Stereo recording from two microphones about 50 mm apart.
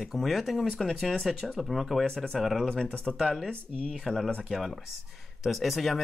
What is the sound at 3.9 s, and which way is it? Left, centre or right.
Speech, centre.